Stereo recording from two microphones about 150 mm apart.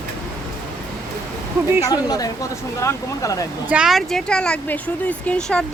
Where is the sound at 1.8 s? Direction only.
25° left (ahead or behind).